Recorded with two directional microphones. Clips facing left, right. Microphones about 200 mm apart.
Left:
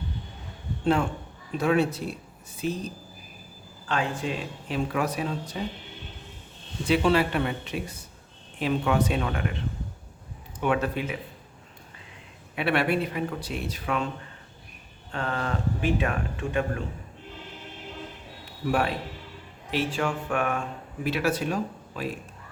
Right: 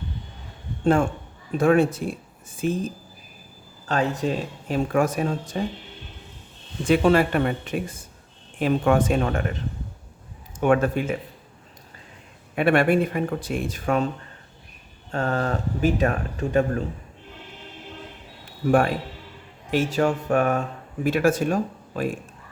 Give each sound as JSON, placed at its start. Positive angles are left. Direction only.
{"t": 1.5, "sound": "speech", "side_deg": -50}
{"t": 6.8, "sound": "speech", "side_deg": -50}
{"t": 12.5, "sound": "speech", "side_deg": -50}
{"t": 15.1, "sound": "speech", "side_deg": -40}
{"t": 18.7, "sound": "speech", "side_deg": -50}